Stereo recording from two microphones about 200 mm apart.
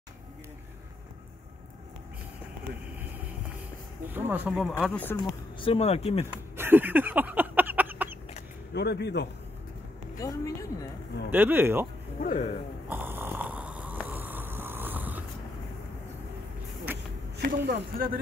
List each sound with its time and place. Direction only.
4.1 s speech: 5° right (ahead or behind)
5.1 s speech: 25° left (ahead or behind)
6.3 s a sound: 10° right (ahead or behind)
8.7 s a man's voice: 55° left (ahead or behind)
10.1 s a woman's voice: 15° left (ahead or behind)
11.2 s speech: 10° right (ahead or behind)
12.2 s a man's voice: 40° left (ahead or behind)
12.8 s snoring: 10° right (ahead or behind)
17.4 s speech: 50° right (ahead or behind)